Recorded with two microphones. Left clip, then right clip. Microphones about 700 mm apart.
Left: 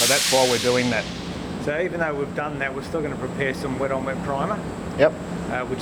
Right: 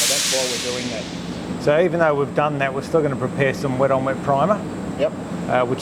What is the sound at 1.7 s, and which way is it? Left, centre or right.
Speech, right.